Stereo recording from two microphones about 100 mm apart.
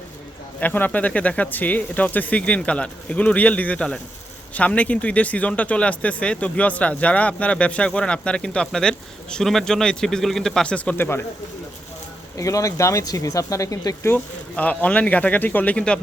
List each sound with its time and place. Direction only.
0.6 s speech: 20° left (ahead or behind)
12.4 s speech: 35° left (ahead or behind)
14.1 s speech: 15° left (ahead or behind)